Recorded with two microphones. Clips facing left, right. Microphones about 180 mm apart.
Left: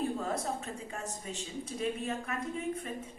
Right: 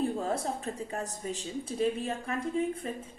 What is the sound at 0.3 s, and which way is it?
Speech, 35° right (ahead or behind).